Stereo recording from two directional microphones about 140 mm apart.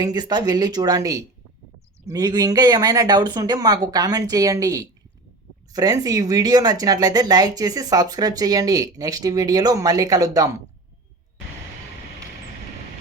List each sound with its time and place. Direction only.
0.0 s speech: 30° right (ahead or behind)